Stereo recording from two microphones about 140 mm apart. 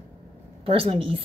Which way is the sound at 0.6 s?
40° right (ahead or behind).